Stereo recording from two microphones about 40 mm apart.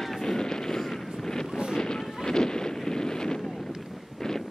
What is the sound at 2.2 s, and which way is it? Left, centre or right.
Wind noise, centre.